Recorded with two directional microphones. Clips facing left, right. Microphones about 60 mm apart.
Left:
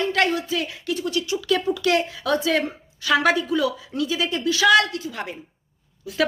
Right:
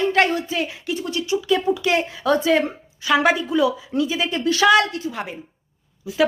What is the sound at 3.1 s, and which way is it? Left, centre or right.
Speech, centre.